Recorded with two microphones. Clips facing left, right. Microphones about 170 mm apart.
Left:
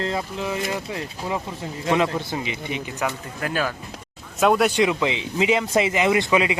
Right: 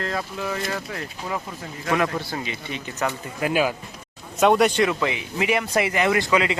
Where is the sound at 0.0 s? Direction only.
20° left (ahead or behind).